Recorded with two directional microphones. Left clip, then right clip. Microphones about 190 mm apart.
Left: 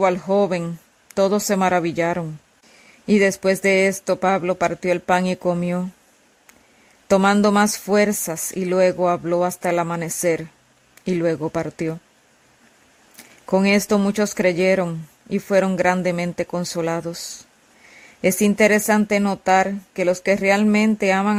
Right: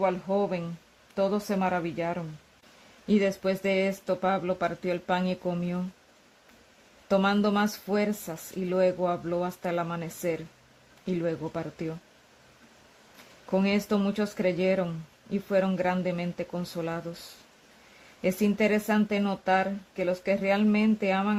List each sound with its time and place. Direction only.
0.0 s speech: 50° left (ahead or behind)
7.1 s speech: 45° left (ahead or behind)
13.5 s speech: 45° left (ahead or behind)
18.2 s speech: 45° left (ahead or behind)